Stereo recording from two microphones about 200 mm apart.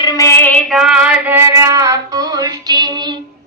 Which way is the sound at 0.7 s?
Centre (ahead or behind).